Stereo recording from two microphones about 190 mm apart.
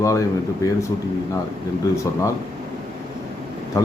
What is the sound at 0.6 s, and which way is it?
Speech, 20° left (ahead or behind).